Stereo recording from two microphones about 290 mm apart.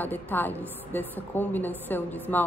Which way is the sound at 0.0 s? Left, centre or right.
Centre.